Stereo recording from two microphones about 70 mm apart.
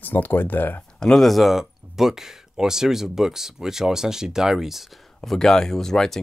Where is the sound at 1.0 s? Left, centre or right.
Centre.